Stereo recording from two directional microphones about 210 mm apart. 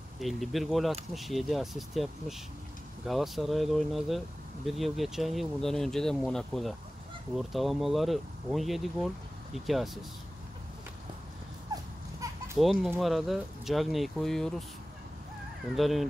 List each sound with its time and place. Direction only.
0.2 s speech: centre (ahead or behind)
11.7 s baby cry: 15° right (ahead or behind)
12.5 s speech: centre (ahead or behind)
15.7 s speech: centre (ahead or behind)